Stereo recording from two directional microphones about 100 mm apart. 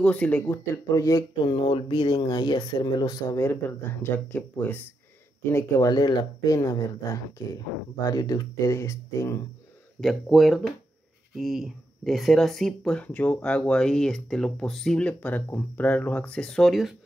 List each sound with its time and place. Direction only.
0.0 s speech: 15° left (ahead or behind)
0.5 s speech: 35° left (ahead or behind)
1.4 s speech: 55° left (ahead or behind); by 3.4 s 35° left (ahead or behind)
3.4 s speech: 20° left (ahead or behind)
5.9 s speech: 45° left (ahead or behind)
9.9 s speech: centre (ahead or behind)